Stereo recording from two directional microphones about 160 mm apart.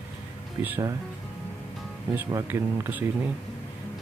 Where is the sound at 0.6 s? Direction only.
10° right (ahead or behind).